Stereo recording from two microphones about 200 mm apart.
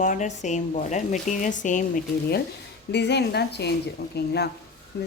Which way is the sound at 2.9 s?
55° left (ahead or behind).